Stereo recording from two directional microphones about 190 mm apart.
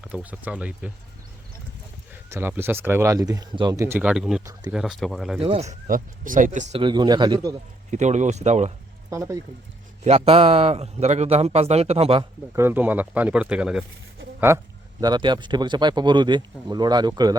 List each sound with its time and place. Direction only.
0.1 s speech: 10° right (ahead or behind)
2.3 s speech: 10° right (ahead or behind)
5.4 s a man's voice: 30° right (ahead or behind)
5.9 s speech: 45° right (ahead or behind)
6.8 s speech: 25° right (ahead or behind)
7.9 s a man's voice: 40° right (ahead or behind)
9.0 s speech: 15° right (ahead or behind)
10.0 s a man's voice: 30° right (ahead or behind)
12.5 s speech: 10° right (ahead or behind)